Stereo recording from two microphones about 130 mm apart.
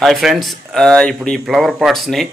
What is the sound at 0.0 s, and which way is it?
Speech, centre (ahead or behind).